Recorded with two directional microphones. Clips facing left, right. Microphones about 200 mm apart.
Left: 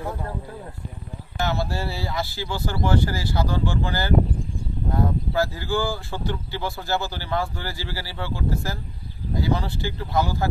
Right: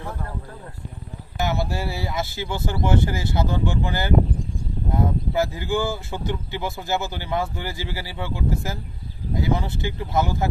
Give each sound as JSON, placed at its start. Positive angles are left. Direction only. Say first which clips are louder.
{"t": 1.4, "sound": "speech", "louder": "right 1 dB", "side_deg": -20}